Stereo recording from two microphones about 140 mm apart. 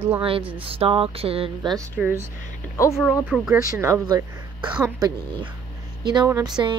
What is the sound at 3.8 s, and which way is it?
Speech, 20° right (ahead or behind).